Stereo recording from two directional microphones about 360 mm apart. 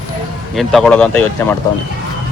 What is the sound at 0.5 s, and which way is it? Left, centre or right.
Speech, centre.